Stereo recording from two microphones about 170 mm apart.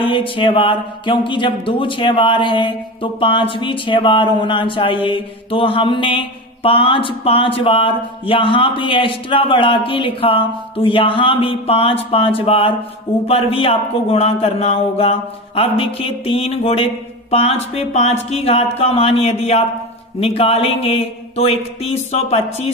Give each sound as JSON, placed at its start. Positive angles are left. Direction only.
{"t": 0.1, "sound": "speech", "side_deg": 30}